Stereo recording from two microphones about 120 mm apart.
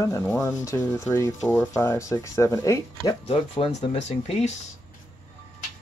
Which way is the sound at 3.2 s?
55° left (ahead or behind).